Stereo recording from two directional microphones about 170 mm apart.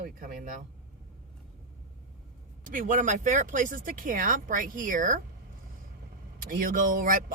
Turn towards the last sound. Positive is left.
turn(degrees=-50)  # may be behind; listen again after turning